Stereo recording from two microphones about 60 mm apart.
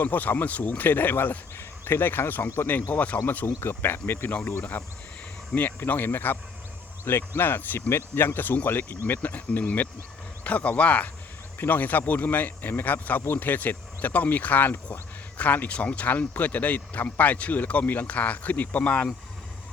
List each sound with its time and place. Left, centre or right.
0.0 s speech: left
3.2 s speech: left
4.3 s speech: left
5.5 s speech: left
11.5 s speech: left